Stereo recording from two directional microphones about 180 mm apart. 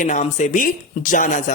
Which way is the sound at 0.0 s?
45° left (ahead or behind).